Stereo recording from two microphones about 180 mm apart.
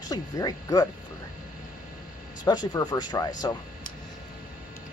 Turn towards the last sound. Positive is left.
turn(degrees=20)  # may be behind; listen again after turning